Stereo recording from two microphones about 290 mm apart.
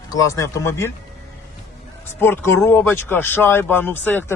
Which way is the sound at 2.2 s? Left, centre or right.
Centre.